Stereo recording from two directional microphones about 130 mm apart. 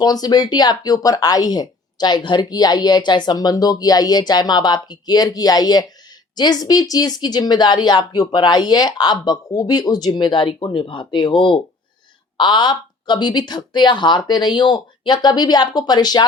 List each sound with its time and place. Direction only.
0.0 s a woman's voice: 30° left (ahead or behind)